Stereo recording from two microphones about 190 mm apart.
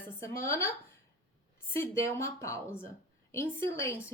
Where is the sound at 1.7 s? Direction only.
15° left (ahead or behind).